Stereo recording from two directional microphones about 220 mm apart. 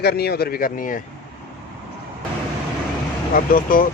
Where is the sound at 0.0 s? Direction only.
45° left (ahead or behind).